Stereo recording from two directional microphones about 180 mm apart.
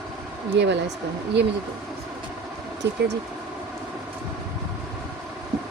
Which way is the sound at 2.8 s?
70° right (ahead or behind).